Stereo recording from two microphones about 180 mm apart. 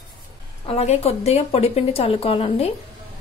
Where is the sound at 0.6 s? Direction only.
35° left (ahead or behind).